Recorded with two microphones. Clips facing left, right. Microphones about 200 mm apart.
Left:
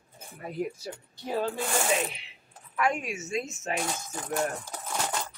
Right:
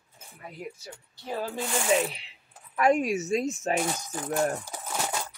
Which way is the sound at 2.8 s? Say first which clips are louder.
Right 6 dB; 35° right (ahead or behind).